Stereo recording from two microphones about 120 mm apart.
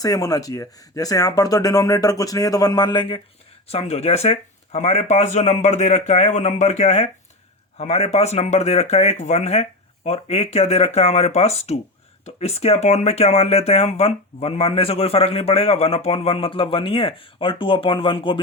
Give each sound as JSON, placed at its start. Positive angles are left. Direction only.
{"t": 0.0, "sound": "speech", "side_deg": 30}
{"t": 3.7, "sound": "speech", "side_deg": 60}